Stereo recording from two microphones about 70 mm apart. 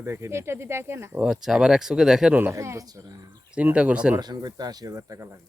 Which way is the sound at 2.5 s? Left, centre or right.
Right.